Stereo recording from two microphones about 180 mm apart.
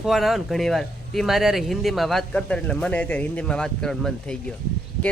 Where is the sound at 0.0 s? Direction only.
Centre (ahead or behind).